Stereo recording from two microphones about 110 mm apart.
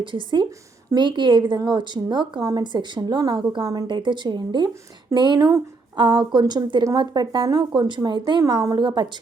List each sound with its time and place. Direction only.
0.0 s a woman's voice: 50° right (ahead or behind)
7.4 s speech: 35° right (ahead or behind)
7.8 s speech: 45° right (ahead or behind)